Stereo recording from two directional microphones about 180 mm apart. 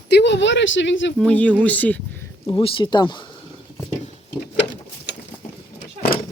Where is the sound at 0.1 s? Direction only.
70° left (ahead or behind); by 1.1 s 90° left.